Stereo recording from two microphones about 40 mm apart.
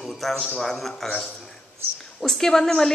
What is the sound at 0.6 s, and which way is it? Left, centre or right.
Speech, centre.